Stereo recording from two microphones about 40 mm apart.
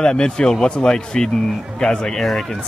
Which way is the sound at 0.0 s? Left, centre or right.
Left.